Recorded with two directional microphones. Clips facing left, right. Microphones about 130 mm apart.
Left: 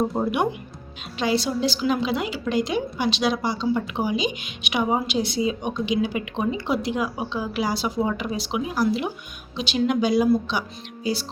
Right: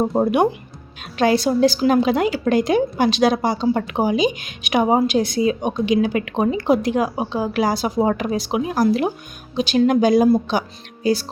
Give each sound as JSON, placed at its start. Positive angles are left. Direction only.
{"t": 0.2, "sound": "a woman's voice", "side_deg": -45}